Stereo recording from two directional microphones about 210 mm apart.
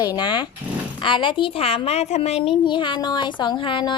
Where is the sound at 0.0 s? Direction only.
20° left (ahead or behind).